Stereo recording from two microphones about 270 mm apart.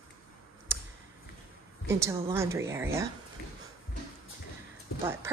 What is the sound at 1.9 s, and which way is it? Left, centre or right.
A woman's voice, centre.